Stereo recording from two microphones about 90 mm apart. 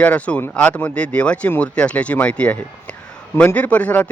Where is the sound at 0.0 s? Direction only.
15° left (ahead or behind).